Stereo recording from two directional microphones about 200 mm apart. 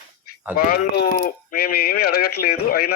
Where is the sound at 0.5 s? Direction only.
50° left (ahead or behind).